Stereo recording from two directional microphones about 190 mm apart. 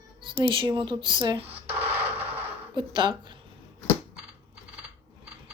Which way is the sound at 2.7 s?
25° right (ahead or behind).